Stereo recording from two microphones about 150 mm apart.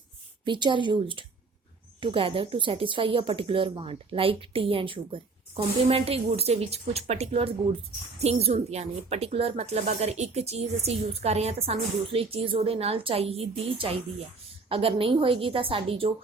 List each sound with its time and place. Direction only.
0.4 s a woman's voice: 30° right (ahead or behind)